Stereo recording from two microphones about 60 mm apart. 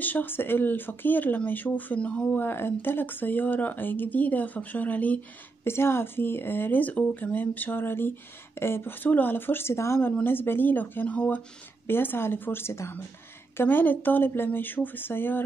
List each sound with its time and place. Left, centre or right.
0.0 s speech: left
2.0 s speech: centre
2.3 s speech: left
5.6 s speech: left
10.2 s speech: left
13.6 s speech: left